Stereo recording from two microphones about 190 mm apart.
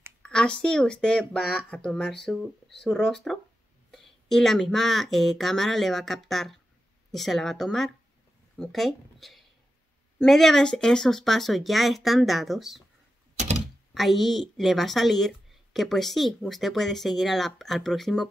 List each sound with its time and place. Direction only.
0.2 s a woman's voice: 5° left (ahead or behind)
13.9 s a woman's voice: centre (ahead or behind)